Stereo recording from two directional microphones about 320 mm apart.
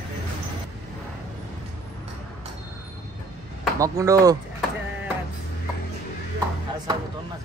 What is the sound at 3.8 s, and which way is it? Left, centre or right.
Speech, centre.